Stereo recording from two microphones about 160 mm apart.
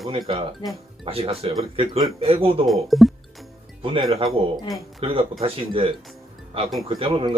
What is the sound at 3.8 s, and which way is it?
A man's voice, 35° right (ahead or behind).